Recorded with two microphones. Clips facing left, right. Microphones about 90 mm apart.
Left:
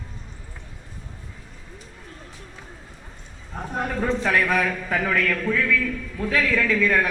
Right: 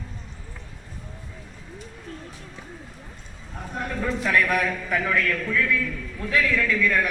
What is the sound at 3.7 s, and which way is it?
Speech, 35° left (ahead or behind).